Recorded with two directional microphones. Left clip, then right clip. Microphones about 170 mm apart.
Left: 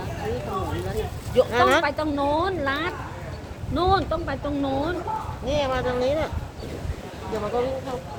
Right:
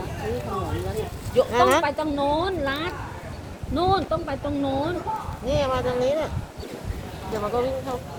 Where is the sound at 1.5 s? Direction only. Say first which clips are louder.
Right 2 dB; 15° right (ahead or behind).